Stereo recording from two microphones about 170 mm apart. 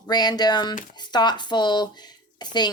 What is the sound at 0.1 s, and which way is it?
A woman's voice, 25° left (ahead or behind).